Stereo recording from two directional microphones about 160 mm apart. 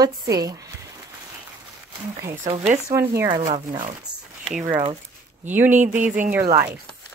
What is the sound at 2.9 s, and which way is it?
Speech, 20° right (ahead or behind).